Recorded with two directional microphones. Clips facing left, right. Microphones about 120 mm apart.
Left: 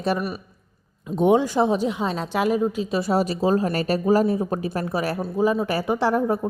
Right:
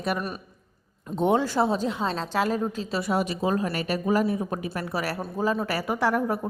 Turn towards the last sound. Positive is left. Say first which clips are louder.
# left 4 dB
turn(degrees=30)  # may be behind; listen again after turning